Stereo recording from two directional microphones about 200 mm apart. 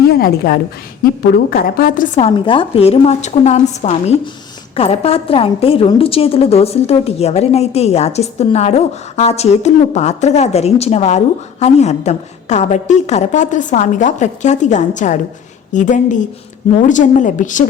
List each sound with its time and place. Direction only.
0.1 s a woman's voice: 50° left (ahead or behind)
2.2 s a woman's voice: 25° left (ahead or behind)